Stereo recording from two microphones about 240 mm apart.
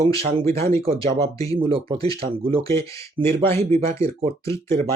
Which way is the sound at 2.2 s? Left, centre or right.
Right.